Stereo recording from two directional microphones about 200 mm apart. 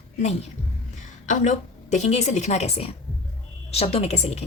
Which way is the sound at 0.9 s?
40° left (ahead or behind).